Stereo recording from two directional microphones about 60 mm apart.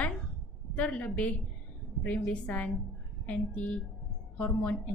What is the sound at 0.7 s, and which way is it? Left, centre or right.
A woman's voice, left.